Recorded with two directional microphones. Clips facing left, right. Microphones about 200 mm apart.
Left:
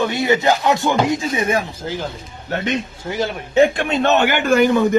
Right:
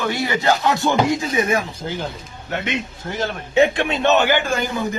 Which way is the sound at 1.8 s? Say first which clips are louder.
Left 1 dB; centre (ahead or behind).